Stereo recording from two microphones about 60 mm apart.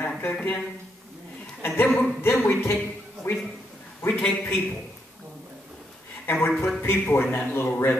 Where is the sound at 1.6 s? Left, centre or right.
Left.